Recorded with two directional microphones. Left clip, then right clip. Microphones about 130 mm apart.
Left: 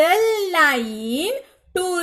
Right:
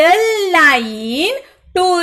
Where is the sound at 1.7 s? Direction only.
35° left (ahead or behind).